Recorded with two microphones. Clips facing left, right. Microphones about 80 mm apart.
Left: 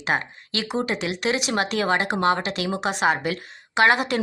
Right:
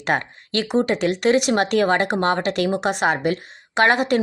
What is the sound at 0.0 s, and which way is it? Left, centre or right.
Speech, right.